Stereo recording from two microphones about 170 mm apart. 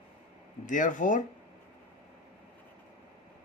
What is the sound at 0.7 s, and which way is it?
Speech, 50° left (ahead or behind).